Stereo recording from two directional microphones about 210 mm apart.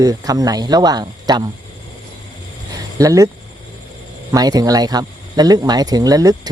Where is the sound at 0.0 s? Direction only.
15° right (ahead or behind).